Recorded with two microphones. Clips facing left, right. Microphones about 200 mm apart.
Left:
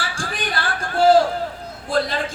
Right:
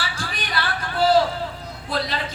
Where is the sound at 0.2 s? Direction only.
50° left (ahead or behind).